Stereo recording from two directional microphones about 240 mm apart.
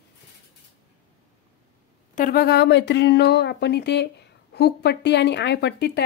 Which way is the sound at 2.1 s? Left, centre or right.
Left.